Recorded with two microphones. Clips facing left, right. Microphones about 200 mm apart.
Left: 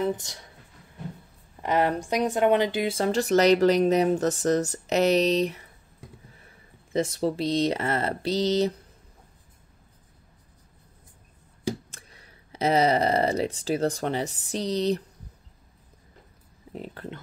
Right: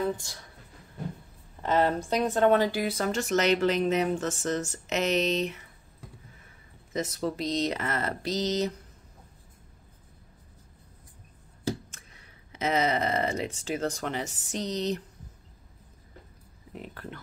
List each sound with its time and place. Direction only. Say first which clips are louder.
0.0 s a woman's voice: left 3 dB; 20° left (ahead or behind)
1.6 s speech: left 1 dB; 15° left (ahead or behind); by 5.6 s 35° left (ahead or behind)
6.9 s speech: left 5 dB; 30° left (ahead or behind)
11.9 s speech: left 2 dB; 35° left (ahead or behind)
16.7 s speech: left 4 dB; 30° left (ahead or behind)